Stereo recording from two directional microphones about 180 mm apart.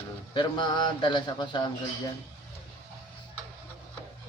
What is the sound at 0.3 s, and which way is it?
A man's voice, 25° left (ahead or behind).